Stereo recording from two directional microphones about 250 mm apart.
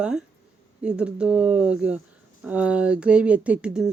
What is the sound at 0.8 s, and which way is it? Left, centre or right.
Speech, centre.